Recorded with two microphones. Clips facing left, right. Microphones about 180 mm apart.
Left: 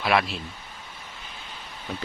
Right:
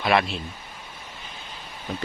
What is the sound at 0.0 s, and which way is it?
Speech, centre (ahead or behind).